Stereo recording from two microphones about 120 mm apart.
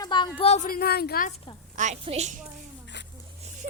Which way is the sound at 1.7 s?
85° right.